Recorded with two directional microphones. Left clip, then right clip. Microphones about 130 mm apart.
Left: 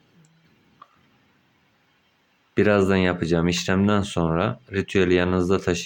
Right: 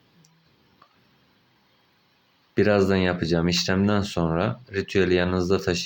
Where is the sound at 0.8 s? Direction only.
20° left (ahead or behind).